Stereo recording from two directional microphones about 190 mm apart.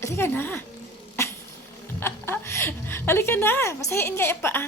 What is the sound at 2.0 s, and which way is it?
A woman's voice, 10° left (ahead or behind).